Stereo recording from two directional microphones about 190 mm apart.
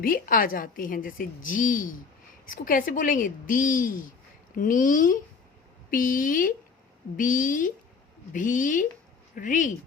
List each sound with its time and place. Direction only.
0.0 s a woman's voice: 50° left (ahead or behind)